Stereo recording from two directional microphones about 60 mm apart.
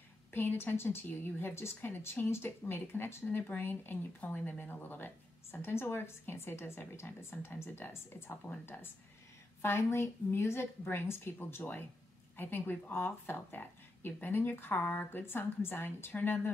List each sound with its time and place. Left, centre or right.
0.3 s a woman's voice: left
9.6 s speech: left